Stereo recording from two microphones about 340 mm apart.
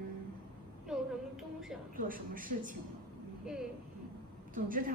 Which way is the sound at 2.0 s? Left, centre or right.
Right.